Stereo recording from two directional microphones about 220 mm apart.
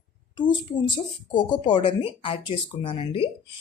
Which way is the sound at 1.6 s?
20° left (ahead or behind).